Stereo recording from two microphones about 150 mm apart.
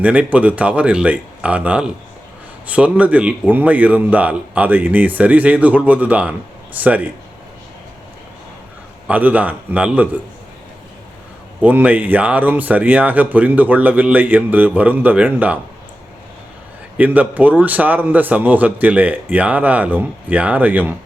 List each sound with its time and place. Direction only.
0.0 s speech: 10° right (ahead or behind)
9.0 s speech: 10° right (ahead or behind)
11.6 s speech: 10° right (ahead or behind)
17.0 s speech: 10° right (ahead or behind)